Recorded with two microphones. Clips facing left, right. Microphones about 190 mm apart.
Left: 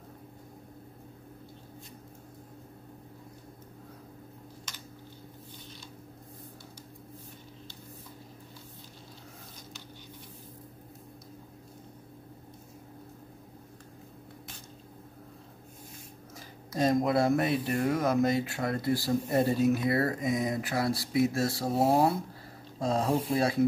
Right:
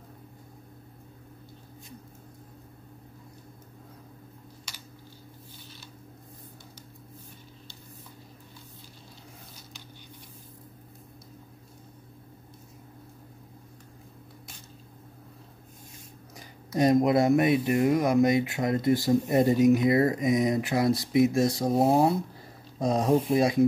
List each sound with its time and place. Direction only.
4.7 s typing: 10° right (ahead or behind)
16.3 s speech: 15° right (ahead or behind)